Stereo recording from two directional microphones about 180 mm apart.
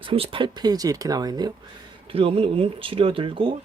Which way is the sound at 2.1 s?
30° right (ahead or behind).